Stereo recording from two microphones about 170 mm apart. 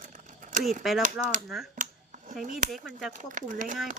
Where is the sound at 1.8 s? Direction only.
50° right (ahead or behind).